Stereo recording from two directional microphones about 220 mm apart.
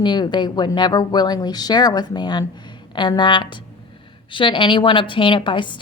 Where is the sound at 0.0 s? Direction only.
20° left (ahead or behind).